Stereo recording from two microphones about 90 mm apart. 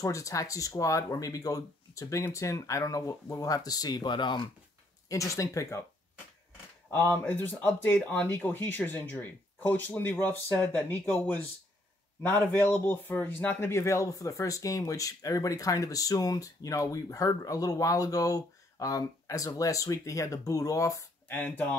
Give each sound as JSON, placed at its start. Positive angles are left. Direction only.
{"t": 0.0, "sound": "speech", "side_deg": 40}
{"t": 5.0, "sound": "speech", "side_deg": 35}
{"t": 6.9, "sound": "speech", "side_deg": 25}
{"t": 21.3, "sound": "speech", "side_deg": 20}